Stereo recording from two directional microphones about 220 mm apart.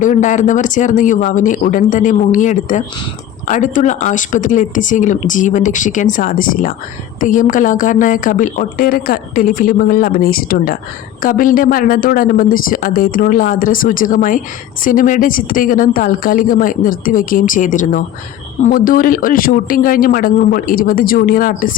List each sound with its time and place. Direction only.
0.0 s a woman's voice: 35° left (ahead or behind)